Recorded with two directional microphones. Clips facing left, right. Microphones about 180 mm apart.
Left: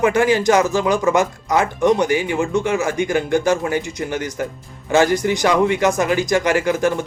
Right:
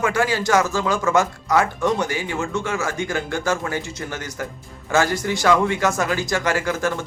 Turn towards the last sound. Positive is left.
turn(degrees=15)  # may be behind; listen again after turning